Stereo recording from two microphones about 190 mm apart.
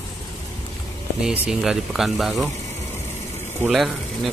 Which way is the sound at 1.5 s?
Centre (ahead or behind).